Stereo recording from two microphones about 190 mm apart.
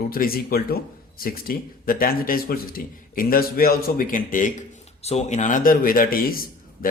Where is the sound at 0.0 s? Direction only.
50° left (ahead or behind).